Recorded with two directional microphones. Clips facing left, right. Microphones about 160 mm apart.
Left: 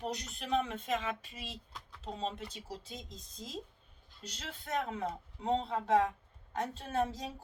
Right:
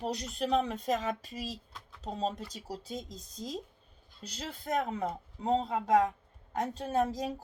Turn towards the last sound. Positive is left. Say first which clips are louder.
# right 4 dB
turn(degrees=-40)  # may be behind; listen again after turning